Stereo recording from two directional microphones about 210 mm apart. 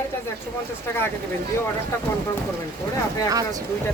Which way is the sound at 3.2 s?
15° right (ahead or behind).